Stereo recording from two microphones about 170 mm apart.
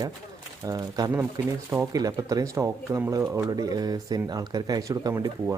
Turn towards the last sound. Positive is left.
turn(degrees=-20)  # may be behind; listen again after turning